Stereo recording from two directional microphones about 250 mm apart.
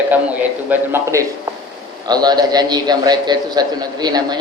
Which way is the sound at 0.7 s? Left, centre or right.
Centre.